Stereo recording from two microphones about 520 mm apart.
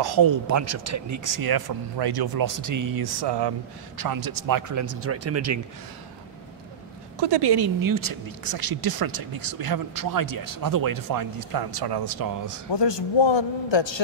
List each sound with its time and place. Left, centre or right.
0.0 s speech: right
7.2 s speech: right
12.7 s a man's voice: left